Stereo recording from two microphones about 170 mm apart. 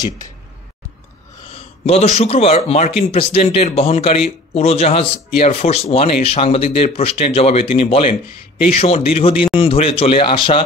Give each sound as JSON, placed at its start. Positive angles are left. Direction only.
{"t": 1.5, "sound": "a man's voice", "side_deg": 40}